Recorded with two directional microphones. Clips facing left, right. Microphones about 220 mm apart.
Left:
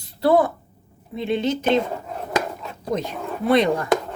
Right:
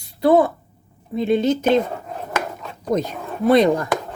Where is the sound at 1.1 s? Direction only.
45° right (ahead or behind).